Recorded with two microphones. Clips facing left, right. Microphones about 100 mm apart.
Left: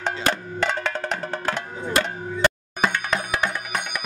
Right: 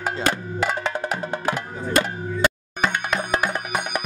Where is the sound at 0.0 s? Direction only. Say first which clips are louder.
Right 1 dB; 10° right (ahead or behind).